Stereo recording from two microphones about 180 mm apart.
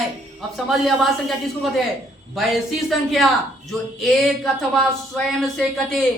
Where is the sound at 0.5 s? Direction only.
Centre (ahead or behind).